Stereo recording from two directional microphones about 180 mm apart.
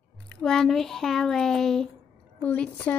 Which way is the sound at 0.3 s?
Centre (ahead or behind).